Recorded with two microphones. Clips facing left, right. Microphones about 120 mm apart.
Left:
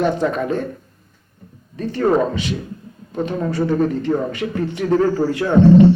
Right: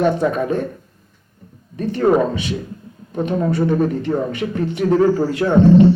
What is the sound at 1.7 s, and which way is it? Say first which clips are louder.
Speech: right 2 dB; 20° right (ahead or behind).